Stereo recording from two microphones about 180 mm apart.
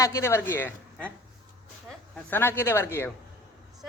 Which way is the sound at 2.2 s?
10° left (ahead or behind).